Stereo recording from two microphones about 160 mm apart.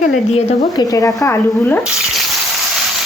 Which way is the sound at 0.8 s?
20° left (ahead or behind).